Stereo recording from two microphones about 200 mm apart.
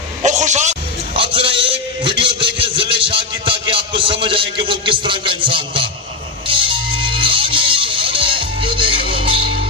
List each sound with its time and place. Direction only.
0.2 s music: 35° right (ahead or behind)